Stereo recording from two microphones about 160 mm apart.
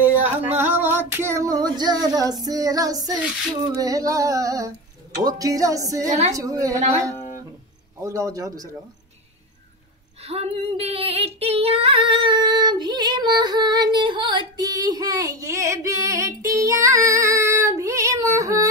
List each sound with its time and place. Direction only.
0.0 s female singing: 10° right (ahead or behind)
6.0 s a woman's voice: 45° right (ahead or behind)
6.3 s female singing: 20° right (ahead or behind)
8.0 s female singing: 20° right (ahead or behind)
10.2 s female singing: 40° right (ahead or behind); by 18.7 s 20° right (ahead or behind)